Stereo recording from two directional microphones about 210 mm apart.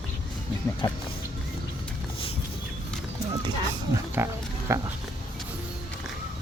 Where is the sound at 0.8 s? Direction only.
20° left (ahead or behind).